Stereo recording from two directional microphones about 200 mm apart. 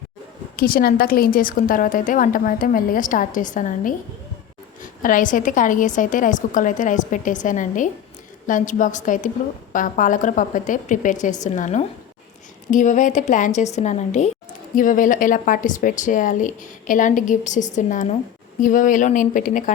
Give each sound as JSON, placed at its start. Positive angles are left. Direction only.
{"t": 0.5, "sound": "a woman's voice", "side_deg": 45}